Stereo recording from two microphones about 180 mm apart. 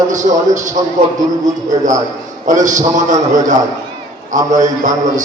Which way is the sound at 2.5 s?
45° right (ahead or behind).